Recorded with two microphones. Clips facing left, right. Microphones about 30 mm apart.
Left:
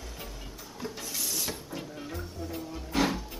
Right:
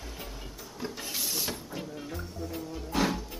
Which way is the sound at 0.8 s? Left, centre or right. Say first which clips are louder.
Right 1 dB; centre.